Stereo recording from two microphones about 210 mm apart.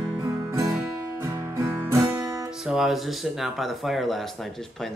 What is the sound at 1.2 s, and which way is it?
Music, 15° right (ahead or behind).